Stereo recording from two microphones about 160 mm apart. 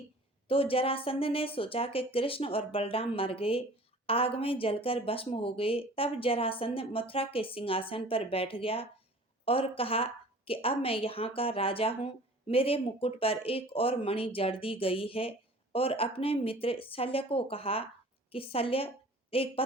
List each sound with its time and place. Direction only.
0.4 s a woman's voice: 35° left (ahead or behind)